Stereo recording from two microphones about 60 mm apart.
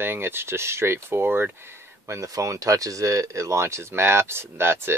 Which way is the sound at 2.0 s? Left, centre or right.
Right.